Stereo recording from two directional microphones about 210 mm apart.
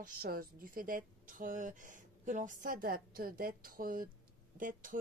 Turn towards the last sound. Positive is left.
turn(degrees=-40)  # may be behind; listen again after turning